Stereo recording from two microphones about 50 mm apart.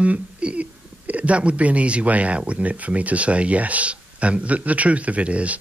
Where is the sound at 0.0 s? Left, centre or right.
Right.